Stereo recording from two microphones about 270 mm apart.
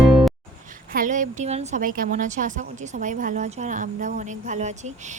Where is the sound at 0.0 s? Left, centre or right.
Centre.